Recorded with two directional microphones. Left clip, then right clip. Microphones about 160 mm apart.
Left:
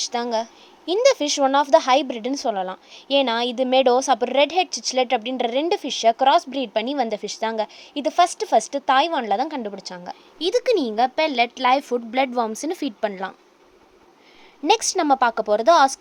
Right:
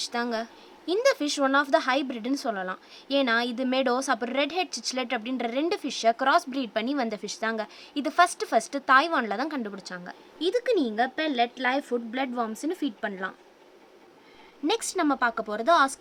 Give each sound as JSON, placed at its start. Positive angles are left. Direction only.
{"t": 0.0, "sound": "a woman's voice", "side_deg": 20}
{"t": 14.7, "sound": "a woman's voice", "side_deg": 30}